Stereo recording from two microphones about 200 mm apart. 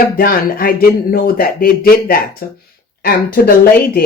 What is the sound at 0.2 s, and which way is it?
Speech, 45° left (ahead or behind).